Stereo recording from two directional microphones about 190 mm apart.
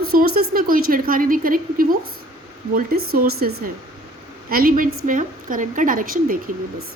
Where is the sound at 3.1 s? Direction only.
55° right (ahead or behind).